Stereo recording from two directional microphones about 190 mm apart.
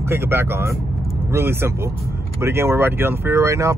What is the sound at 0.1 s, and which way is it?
Speech, 15° right (ahead or behind).